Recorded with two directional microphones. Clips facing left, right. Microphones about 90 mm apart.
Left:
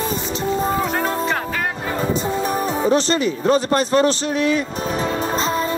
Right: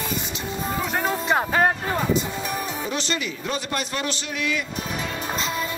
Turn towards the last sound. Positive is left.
turn(degrees=35)  # may be behind; listen again after turning